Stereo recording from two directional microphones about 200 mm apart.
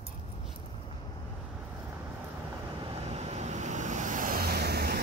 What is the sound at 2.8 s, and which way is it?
Vehicle, 30° right (ahead or behind).